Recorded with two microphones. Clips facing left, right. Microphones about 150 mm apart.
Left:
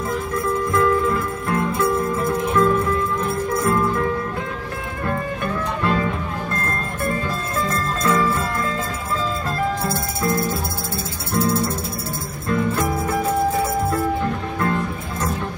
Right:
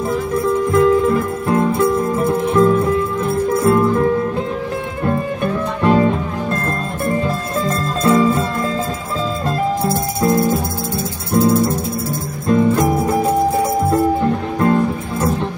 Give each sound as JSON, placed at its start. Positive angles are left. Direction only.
{"t": 0.7, "sound": "music", "side_deg": -25}
{"t": 7.6, "sound": "music", "side_deg": -30}
{"t": 9.8, "sound": "music", "side_deg": -20}
{"t": 14.2, "sound": "music", "side_deg": -25}